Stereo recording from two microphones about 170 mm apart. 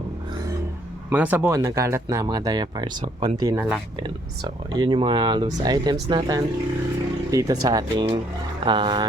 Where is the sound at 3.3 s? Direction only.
20° right (ahead or behind).